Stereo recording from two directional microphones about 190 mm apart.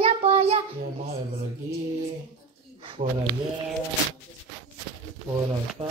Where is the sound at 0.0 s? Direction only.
30° right (ahead or behind).